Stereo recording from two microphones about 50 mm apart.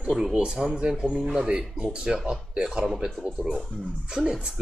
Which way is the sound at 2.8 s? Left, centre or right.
Centre.